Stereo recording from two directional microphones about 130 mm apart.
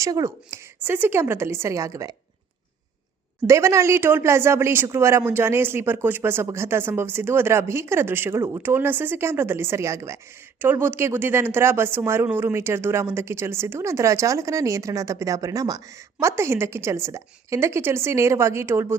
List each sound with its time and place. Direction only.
0.0 s speech: 25° right (ahead or behind)
3.4 s speech: 20° right (ahead or behind)